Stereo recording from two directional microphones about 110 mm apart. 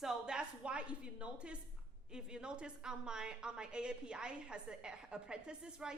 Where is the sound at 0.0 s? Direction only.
5° right (ahead or behind).